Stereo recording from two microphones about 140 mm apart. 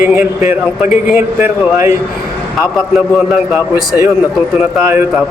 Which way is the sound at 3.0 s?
5° right (ahead or behind).